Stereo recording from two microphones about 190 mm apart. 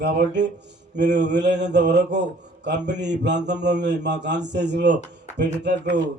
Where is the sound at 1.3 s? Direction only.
65° right (ahead or behind).